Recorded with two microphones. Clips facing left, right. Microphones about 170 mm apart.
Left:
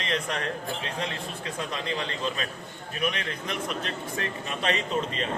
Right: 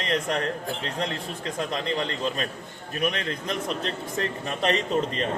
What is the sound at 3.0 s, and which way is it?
A man's voice, 40° right (ahead or behind).